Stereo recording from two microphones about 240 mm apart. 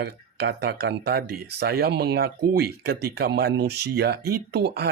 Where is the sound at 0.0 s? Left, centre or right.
Right.